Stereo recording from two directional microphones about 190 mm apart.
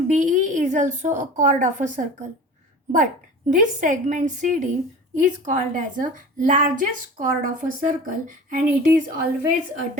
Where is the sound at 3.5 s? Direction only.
40° right (ahead or behind).